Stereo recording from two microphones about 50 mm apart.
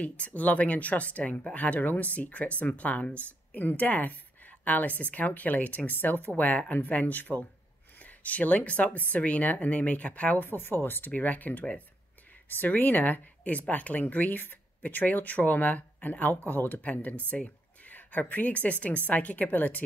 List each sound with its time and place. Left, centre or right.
0.0 s speech: left
11.1 s speech: left
16.8 s a woman's voice: left